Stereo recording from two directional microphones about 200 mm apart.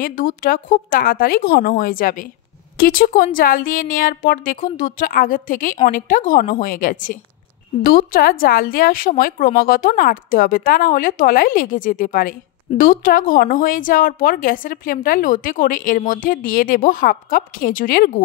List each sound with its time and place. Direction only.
0.0 s a woman's voice: 45° left (ahead or behind)